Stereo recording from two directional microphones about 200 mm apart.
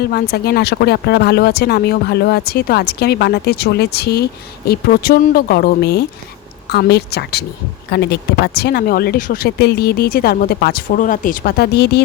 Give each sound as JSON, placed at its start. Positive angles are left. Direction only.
{"t": 0.1, "sound": "a woman's voice", "side_deg": 50}